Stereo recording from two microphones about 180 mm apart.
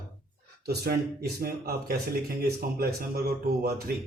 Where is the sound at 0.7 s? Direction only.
60° right (ahead or behind).